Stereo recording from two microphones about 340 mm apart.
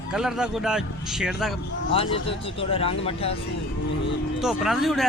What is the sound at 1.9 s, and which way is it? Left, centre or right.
Speech, centre.